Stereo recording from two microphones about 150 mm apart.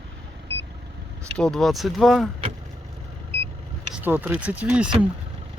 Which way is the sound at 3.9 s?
10° right (ahead or behind).